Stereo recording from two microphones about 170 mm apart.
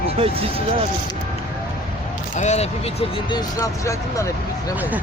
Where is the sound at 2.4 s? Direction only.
40° left (ahead or behind).